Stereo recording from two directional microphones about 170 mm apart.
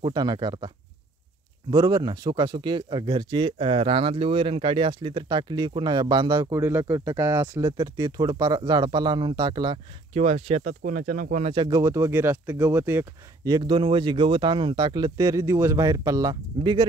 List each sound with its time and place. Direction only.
0.0 s speech: 25° right (ahead or behind)
1.7 s speech: 25° right (ahead or behind); by 11.5 s 50° right (ahead or behind)
11.5 s speech: 25° right (ahead or behind)